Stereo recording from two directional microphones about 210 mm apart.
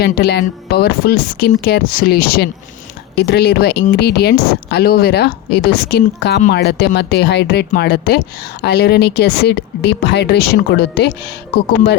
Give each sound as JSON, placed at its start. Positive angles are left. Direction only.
{"t": 0.0, "sound": "speech", "side_deg": 50}